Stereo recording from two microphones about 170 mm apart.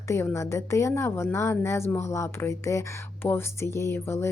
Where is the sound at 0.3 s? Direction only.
15° left (ahead or behind).